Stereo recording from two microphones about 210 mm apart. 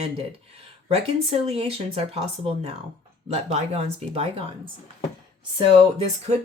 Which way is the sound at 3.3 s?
30° right (ahead or behind).